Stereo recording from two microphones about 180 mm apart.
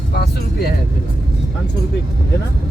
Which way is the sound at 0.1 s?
65° left (ahead or behind).